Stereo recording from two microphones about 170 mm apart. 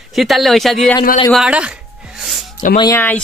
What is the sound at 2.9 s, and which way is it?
Speech, 10° left (ahead or behind).